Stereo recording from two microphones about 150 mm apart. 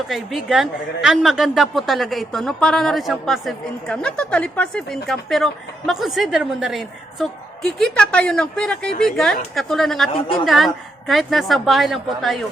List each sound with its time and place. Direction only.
0.1 s a woman's voice: centre (ahead or behind)
10.1 s a woman's voice: 35° left (ahead or behind)
10.4 s a woman's voice: centre (ahead or behind)